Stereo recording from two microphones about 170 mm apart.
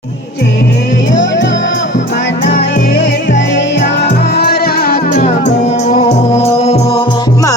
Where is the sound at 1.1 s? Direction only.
90° left.